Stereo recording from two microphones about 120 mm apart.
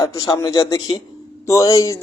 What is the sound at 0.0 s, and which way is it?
A man's voice, 30° left (ahead or behind).